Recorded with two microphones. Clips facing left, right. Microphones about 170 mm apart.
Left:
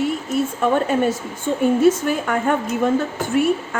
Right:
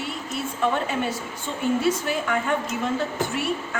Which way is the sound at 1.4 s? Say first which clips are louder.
Left 8 dB; 50° left (ahead or behind).